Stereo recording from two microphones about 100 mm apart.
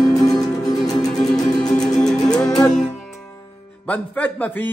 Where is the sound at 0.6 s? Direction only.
40° left (ahead or behind).